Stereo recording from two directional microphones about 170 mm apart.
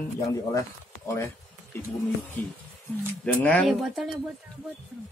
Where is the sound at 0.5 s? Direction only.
20° left (ahead or behind).